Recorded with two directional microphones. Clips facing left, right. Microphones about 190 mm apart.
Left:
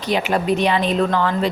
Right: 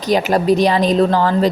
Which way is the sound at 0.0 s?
40° right (ahead or behind).